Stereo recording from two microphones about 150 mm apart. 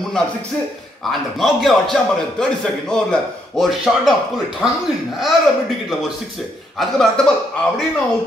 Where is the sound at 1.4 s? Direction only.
Centre (ahead or behind).